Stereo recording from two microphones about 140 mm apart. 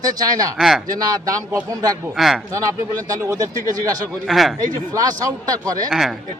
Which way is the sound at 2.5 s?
25° right (ahead or behind).